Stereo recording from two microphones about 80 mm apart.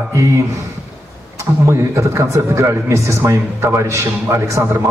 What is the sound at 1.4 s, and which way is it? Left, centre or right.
A man's voice, right.